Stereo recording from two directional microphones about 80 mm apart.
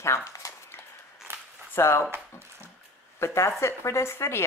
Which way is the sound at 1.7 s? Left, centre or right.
Left.